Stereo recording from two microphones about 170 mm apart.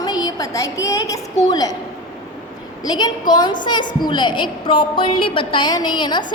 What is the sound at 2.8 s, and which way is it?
A woman's voice, 25° left (ahead or behind).